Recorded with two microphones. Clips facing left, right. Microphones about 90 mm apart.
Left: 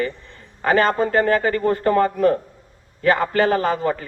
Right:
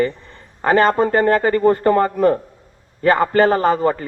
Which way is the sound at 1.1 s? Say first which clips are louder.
Right 3 dB; 45° right (ahead or behind).